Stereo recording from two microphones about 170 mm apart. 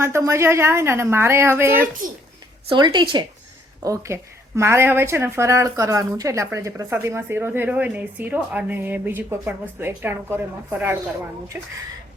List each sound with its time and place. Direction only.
0.0 s speech: 15° right (ahead or behind)
2.6 s speech: 25° right (ahead or behind)
3.8 s speech: 15° right (ahead or behind)